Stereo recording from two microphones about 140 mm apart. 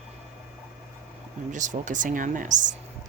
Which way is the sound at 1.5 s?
65° right (ahead or behind).